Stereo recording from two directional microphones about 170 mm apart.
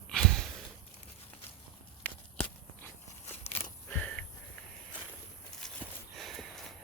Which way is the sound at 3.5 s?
40° left (ahead or behind).